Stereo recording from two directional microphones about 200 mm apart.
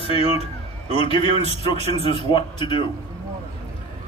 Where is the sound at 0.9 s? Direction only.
25° left (ahead or behind).